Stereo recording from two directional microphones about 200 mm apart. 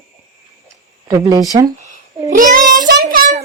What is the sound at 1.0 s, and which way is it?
Speech, 20° right (ahead or behind).